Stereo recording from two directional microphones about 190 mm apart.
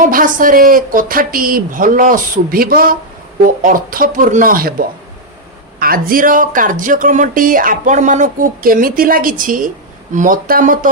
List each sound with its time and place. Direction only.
0.0 s speech: 45° right (ahead or behind)